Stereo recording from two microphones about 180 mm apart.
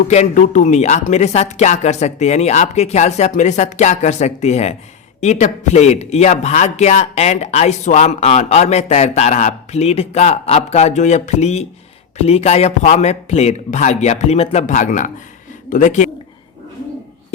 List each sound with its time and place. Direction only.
0.1 s speech: 40° left (ahead or behind)